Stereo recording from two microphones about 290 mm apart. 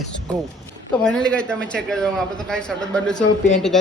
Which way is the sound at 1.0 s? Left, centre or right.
Centre.